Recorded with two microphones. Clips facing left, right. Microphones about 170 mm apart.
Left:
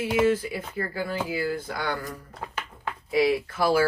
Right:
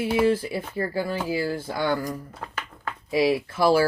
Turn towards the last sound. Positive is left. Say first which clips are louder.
# right 3 dB
turn(degrees=-30)  # may be behind; listen again after turning